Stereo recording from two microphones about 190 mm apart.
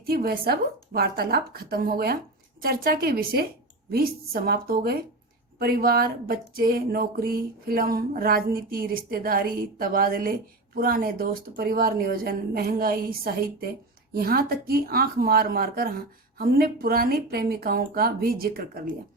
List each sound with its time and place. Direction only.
0.0 s speech: 55° right (ahead or behind)